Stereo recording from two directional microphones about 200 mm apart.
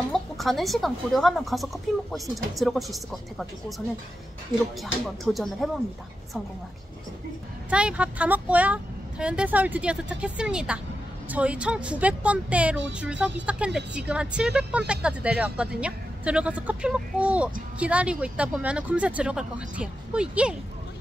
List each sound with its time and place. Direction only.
0.1 s speech: centre (ahead or behind)
5.0 s speech: centre (ahead or behind)
7.7 s speech: 5° right (ahead or behind)